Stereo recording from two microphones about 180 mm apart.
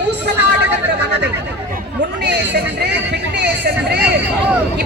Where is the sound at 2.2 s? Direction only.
65° right (ahead or behind).